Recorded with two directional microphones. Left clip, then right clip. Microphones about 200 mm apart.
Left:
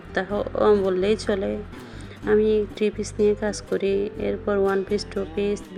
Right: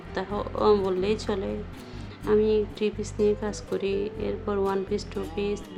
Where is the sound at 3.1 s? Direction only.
Centre (ahead or behind).